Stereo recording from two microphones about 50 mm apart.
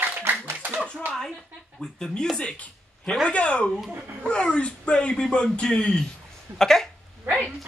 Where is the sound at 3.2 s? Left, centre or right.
Left; by 6.9 s centre.